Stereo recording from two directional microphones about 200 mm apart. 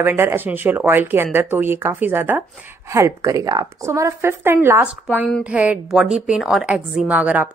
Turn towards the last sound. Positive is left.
turn(degrees=-5)  # may be behind; listen again after turning